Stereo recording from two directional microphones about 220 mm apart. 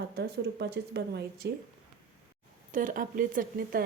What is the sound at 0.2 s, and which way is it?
A woman's voice, 50° right (ahead or behind).